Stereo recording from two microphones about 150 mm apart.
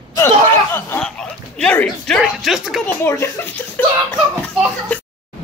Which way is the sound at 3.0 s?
15° left (ahead or behind).